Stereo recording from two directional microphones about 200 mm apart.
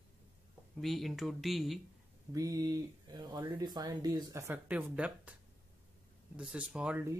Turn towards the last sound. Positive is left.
turn(degrees=-5)  # may be behind; listen again after turning